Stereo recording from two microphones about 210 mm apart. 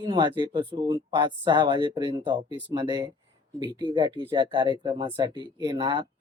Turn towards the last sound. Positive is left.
turn(degrees=-20)  # may be behind; listen again after turning